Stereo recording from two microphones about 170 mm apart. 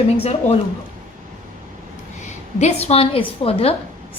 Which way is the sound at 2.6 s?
40° left (ahead or behind).